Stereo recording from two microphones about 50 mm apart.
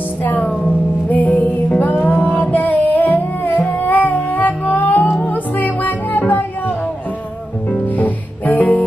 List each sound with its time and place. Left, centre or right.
0.2 s music: left
7.7 s music: left